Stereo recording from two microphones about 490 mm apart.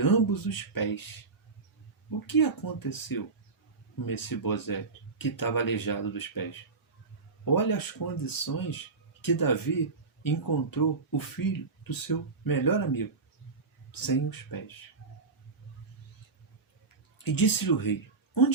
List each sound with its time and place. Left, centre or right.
0.0 s speech: left
2.0 s speech: left
14.1 s speech: left
17.2 s speech: left